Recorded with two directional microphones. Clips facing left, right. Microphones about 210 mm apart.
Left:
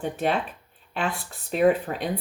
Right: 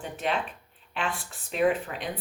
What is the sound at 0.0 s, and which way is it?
Speech, 40° left (ahead or behind).